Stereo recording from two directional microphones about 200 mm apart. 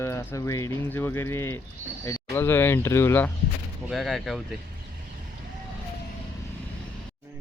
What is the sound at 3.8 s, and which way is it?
Speech, centre (ahead or behind).